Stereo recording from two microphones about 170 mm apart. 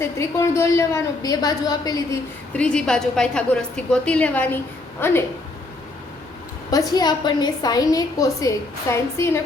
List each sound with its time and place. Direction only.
0.0 s a woman's voice: 15° left (ahead or behind)
2.5 s a woman's voice: 5° left (ahead or behind)
6.7 s a woman's voice: 20° left (ahead or behind)